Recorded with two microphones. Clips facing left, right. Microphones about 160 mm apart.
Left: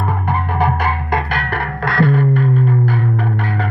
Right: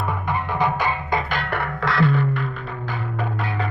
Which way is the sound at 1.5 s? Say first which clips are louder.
Left 3 dB; 55° left (ahead or behind).